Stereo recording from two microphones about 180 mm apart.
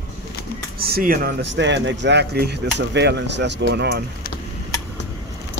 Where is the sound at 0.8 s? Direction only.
55° right (ahead or behind).